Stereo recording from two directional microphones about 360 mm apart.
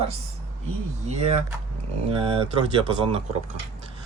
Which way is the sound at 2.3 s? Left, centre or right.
Centre.